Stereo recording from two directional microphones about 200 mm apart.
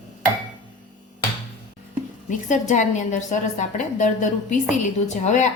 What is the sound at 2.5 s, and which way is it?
A woman's voice, 35° left (ahead or behind).